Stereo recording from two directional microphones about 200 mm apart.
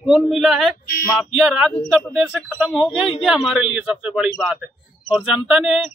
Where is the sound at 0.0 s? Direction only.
Centre (ahead or behind).